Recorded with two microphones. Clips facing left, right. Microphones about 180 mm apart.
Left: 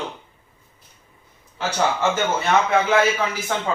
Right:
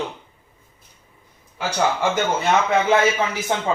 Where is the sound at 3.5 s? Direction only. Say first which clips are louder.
Right 3 dB; 20° right (ahead or behind).